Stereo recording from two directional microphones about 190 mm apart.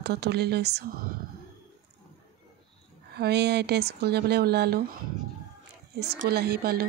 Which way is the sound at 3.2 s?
60° right (ahead or behind).